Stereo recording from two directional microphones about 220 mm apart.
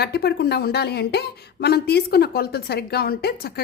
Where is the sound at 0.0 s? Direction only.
45° left (ahead or behind).